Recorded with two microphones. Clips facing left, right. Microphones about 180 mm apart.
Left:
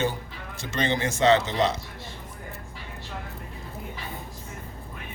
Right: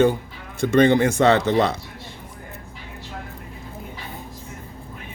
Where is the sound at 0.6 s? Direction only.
55° right (ahead or behind).